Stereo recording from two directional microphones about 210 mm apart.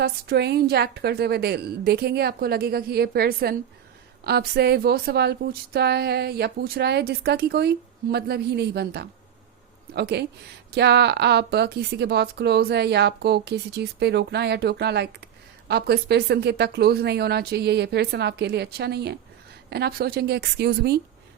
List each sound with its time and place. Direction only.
0.0 s a woman's voice: 50° right (ahead or behind)